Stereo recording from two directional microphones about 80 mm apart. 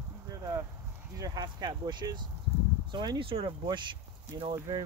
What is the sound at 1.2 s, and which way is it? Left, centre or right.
Speech, right.